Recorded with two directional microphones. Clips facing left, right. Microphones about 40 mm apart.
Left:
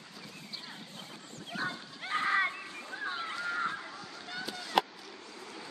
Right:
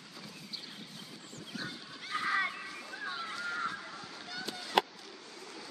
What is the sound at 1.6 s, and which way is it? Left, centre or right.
Bow-wow, left.